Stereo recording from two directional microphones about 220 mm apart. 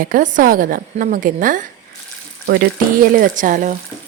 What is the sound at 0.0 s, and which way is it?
Speech, 35° right (ahead or behind).